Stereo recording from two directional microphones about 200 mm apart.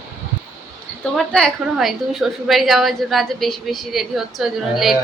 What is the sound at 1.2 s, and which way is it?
A woman's voice, 5° left (ahead or behind).